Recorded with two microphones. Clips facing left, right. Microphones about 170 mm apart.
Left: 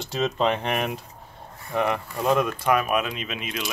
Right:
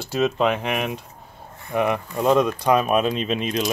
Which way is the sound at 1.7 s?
15° right (ahead or behind).